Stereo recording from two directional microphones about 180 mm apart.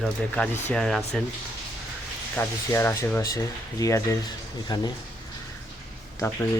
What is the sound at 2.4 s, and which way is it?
Speech, 15° left (ahead or behind).